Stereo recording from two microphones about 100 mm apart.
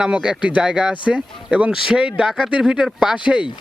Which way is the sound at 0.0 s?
10° right (ahead or behind).